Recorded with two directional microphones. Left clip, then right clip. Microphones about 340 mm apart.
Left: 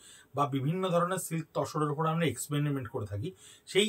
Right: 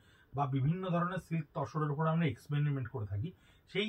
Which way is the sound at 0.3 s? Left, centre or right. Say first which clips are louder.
Left 5 dB; centre.